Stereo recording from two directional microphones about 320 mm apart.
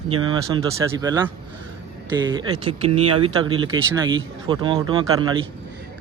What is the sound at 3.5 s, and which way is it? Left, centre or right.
Speech, centre.